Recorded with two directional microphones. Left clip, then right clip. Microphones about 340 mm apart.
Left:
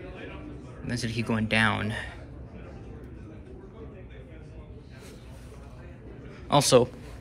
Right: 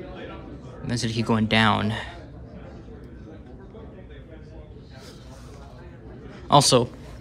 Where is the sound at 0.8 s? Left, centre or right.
Centre.